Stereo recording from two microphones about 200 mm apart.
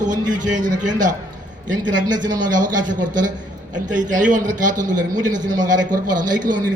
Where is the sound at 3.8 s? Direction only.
40° right (ahead or behind).